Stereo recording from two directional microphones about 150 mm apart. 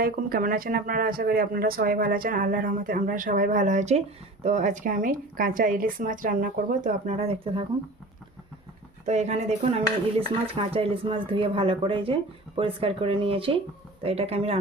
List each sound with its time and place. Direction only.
0.0 s speech: 85° right; by 7.6 s 40° right (ahead or behind)
9.0 s stir: 50° right (ahead or behind)